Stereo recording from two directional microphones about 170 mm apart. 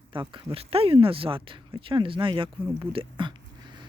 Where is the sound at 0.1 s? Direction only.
30° right (ahead or behind).